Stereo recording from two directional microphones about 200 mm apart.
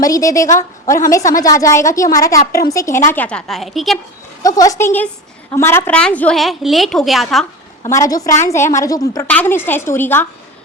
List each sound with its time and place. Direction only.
0.0 s a woman's voice: 15° left (ahead or behind); by 3.9 s centre (ahead or behind)
4.4 s a woman's voice: 15° left (ahead or behind); by 7.4 s centre (ahead or behind)
7.9 s a woman's voice: 15° left (ahead or behind)